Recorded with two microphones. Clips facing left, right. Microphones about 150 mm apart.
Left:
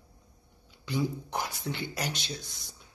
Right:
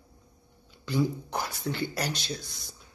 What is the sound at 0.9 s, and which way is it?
Speech, 20° left (ahead or behind).